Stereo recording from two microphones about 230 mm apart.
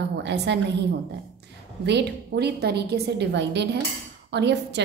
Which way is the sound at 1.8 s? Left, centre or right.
Right.